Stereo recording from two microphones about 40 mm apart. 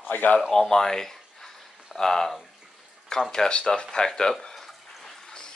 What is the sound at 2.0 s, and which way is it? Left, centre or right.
Speech, centre.